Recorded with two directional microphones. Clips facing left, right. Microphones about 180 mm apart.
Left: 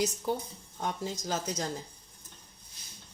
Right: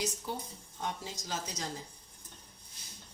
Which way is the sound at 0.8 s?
45° left (ahead or behind).